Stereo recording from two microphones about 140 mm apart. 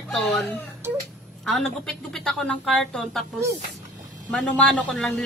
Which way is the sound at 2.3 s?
5° left (ahead or behind).